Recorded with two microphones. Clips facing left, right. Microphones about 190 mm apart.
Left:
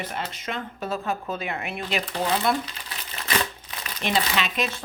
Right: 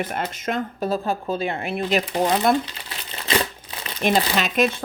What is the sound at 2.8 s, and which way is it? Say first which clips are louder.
Crumpling: right 4 dB; 30° right (ahead or behind).